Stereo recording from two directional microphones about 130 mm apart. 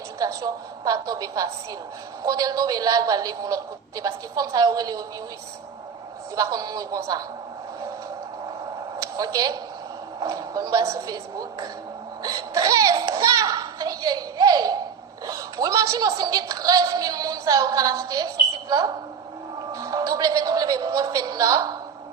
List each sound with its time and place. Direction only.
0.2 s a woman's voice: 30° right (ahead or behind)
6.3 s a woman's voice: 30° right (ahead or behind)
9.0 s a sound: 30° right (ahead or behind)
10.2 s a woman's voice: 25° right (ahead or behind)
12.2 s a sound: 25° right (ahead or behind)
15.3 s a woman's voice: 25° right (ahead or behind)